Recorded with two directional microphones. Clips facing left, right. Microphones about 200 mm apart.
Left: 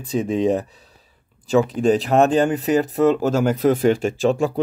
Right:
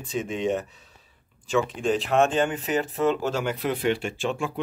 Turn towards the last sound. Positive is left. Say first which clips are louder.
# left 9 dB
turn(degrees=40)  # may be behind; listen again after turning